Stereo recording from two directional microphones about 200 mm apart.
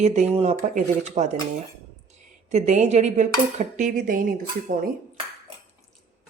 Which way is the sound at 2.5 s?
35° right (ahead or behind).